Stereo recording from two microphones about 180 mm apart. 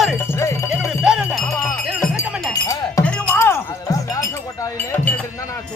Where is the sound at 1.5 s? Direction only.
10° left (ahead or behind).